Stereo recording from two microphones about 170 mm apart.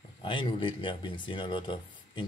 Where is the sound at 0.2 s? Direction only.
30° left (ahead or behind).